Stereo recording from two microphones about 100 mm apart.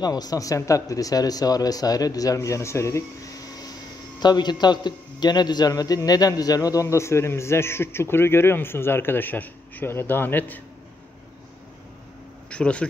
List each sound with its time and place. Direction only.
0.0 s a man's voice: 40° left (ahead or behind); by 10.6 s 20° left (ahead or behind)
12.4 s speech: 10° left (ahead or behind)